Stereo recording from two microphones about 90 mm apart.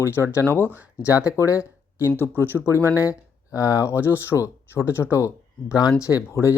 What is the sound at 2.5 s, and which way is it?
Speech, 30° right (ahead or behind).